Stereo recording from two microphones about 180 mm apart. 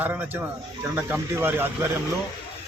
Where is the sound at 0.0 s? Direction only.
10° right (ahead or behind).